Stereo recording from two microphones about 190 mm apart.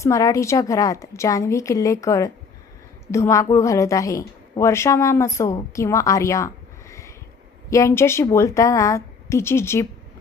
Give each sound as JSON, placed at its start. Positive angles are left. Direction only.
{"t": 0.0, "sound": "a woman's voice", "side_deg": 15}